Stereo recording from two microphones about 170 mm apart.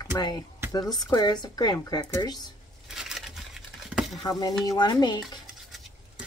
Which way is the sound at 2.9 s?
Centre (ahead or behind).